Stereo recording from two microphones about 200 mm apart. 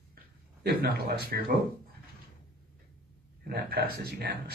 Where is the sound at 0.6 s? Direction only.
50° right (ahead or behind).